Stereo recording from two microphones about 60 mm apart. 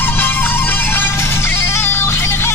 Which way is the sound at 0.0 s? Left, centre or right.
Left.